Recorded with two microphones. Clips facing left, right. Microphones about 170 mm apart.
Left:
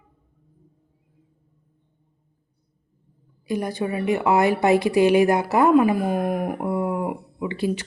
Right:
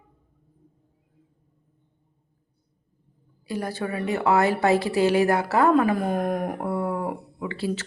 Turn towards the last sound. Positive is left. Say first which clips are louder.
# left 3 dB
turn(degrees=15)  # may be behind; listen again after turning